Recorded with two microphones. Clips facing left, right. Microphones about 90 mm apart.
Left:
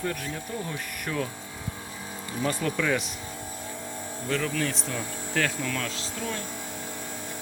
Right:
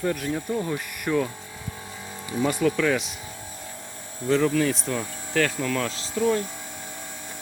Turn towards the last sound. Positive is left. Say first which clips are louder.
# right 9 dB
turn(degrees=-15)  # may be behind; listen again after turning